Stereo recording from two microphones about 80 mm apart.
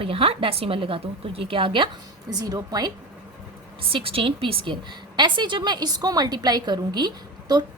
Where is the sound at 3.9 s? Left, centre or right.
Right.